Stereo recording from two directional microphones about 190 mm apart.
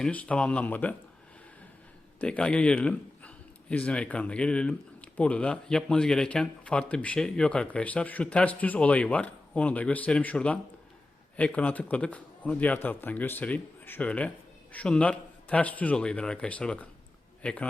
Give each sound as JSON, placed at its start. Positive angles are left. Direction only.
{"t": 0.0, "sound": "a man's voice", "side_deg": 5}
{"t": 2.2, "sound": "a man's voice", "side_deg": 5}